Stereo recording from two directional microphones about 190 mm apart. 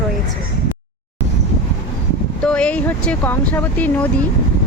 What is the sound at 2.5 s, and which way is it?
Speech, 5° left (ahead or behind).